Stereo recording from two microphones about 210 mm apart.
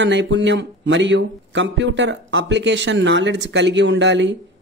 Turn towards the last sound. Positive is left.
turn(degrees=-60)  # may be behind; listen again after turning